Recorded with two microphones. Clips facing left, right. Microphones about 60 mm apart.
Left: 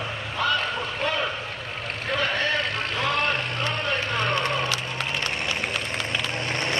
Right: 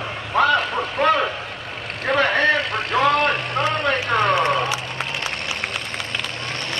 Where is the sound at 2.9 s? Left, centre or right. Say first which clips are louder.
Right 8 dB; right.